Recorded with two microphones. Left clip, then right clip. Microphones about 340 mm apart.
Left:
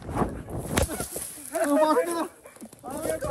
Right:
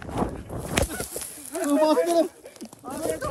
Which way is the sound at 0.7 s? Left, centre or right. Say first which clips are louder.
Right 1 dB; centre.